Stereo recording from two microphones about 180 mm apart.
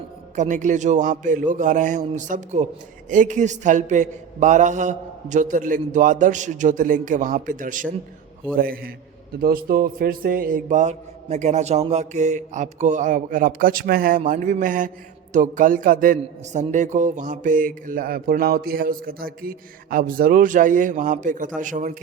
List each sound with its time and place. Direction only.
0.3 s a man's voice: 45° right (ahead or behind)